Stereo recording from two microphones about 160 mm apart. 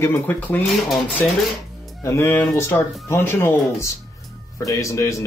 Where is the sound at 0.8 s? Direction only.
Centre (ahead or behind).